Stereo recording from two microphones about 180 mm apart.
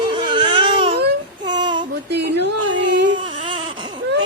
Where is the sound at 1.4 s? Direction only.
25° right (ahead or behind).